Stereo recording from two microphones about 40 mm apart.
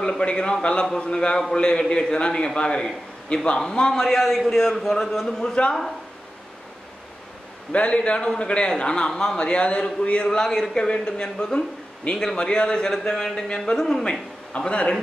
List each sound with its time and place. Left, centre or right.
0.2 s a man's voice: left
4.0 s a man's voice: centre
7.7 s a man's voice: left
10.3 s a man's voice: centre